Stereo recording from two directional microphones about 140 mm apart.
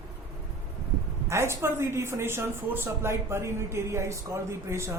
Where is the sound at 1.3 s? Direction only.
20° right (ahead or behind).